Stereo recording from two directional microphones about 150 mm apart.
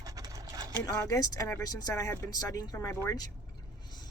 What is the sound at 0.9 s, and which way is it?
Speech, 25° left (ahead or behind).